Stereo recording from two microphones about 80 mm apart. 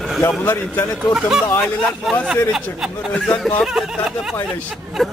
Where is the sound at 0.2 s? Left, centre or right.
Left.